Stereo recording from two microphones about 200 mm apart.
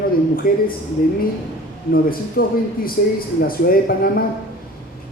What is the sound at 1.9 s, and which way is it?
A man's voice, 45° left (ahead or behind).